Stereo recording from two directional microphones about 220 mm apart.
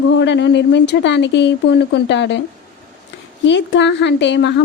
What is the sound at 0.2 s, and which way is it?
Speech, 50° left (ahead or behind).